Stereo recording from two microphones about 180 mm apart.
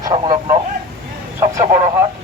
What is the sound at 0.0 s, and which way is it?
Radio, 20° right (ahead or behind).